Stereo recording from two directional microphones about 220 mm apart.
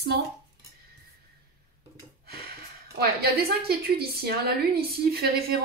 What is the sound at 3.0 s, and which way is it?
A woman's voice, 45° right (ahead or behind).